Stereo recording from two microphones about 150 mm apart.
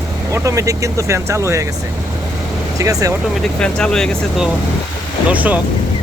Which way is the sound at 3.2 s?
Centre (ahead or behind).